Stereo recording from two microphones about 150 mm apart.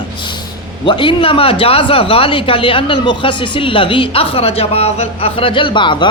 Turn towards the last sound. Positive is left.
turn(degrees=30)  # may be behind; listen again after turning